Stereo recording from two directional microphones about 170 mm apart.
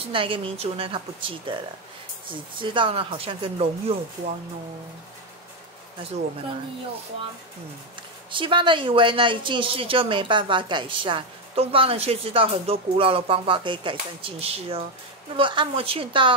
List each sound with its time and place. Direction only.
0.0 s speech: 30° right (ahead or behind)
8.3 s speech: 30° right (ahead or behind)